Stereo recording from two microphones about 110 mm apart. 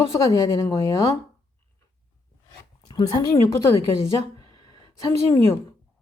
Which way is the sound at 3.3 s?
25° left (ahead or behind).